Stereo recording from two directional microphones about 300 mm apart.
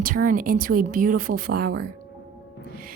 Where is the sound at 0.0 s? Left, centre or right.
Right.